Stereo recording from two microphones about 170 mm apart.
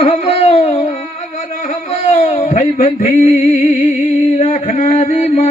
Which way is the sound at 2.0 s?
45° left (ahead or behind).